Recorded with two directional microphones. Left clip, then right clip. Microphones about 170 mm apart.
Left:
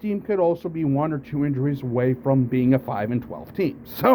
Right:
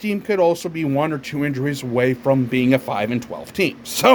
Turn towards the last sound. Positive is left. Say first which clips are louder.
# right 5 dB
turn(degrees=-15)  # may be behind; listen again after turning